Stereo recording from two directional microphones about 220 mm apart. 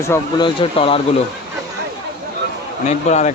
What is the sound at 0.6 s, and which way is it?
Speech, 25° left (ahead or behind).